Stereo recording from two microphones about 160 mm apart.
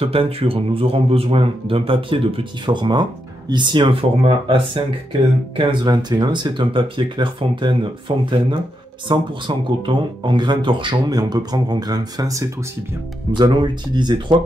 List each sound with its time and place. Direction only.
0.0 s speech: 35° right (ahead or behind)